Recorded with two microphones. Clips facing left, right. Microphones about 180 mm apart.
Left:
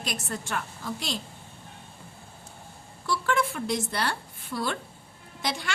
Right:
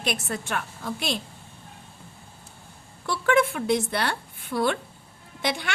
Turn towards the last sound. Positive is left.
turn(degrees=-60)  # may be behind; listen again after turning